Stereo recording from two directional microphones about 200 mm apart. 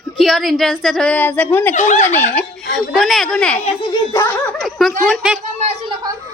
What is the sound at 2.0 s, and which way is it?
A woman's voice, 10° left (ahead or behind).